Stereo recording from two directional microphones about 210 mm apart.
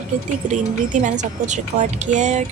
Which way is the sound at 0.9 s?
35° right (ahead or behind).